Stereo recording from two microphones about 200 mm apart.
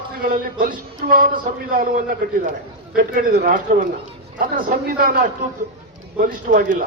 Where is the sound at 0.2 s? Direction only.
45° right (ahead or behind).